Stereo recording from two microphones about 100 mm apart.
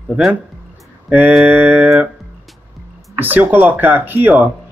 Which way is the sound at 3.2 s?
20° right (ahead or behind).